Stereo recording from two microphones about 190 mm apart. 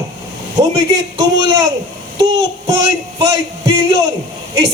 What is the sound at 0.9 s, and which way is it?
Speech, 20° right (ahead or behind).